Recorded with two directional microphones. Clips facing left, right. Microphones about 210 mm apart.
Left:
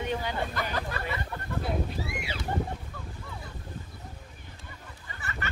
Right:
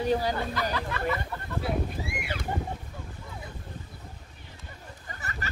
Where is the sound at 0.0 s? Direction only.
35° right (ahead or behind).